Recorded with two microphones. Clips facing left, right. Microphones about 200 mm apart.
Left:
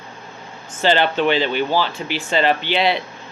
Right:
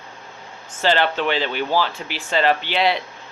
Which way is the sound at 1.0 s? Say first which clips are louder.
Left 4 dB; centre (ahead or behind).